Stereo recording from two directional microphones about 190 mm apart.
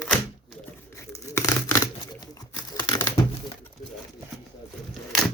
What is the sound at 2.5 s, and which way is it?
Crumpling, 20° left (ahead or behind).